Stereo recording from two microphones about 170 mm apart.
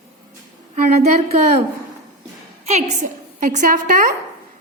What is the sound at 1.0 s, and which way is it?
Speech, 40° right (ahead or behind).